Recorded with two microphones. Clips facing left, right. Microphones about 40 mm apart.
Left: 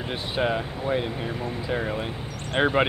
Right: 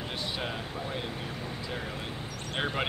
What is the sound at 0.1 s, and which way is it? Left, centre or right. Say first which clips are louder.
Speech: left 11 dB; left.